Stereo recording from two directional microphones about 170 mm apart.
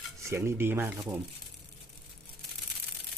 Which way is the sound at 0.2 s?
15° right (ahead or behind).